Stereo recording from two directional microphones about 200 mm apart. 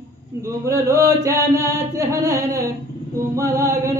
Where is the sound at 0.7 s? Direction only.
15° right (ahead or behind).